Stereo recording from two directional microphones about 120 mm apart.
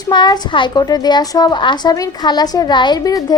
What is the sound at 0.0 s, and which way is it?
A woman's voice, 35° left (ahead or behind).